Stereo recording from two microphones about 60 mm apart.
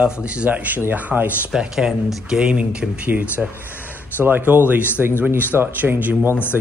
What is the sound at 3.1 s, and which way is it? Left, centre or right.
Speech, right.